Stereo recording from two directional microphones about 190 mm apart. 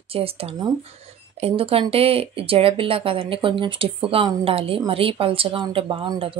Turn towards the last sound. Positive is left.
turn(degrees=-25)  # may be behind; listen again after turning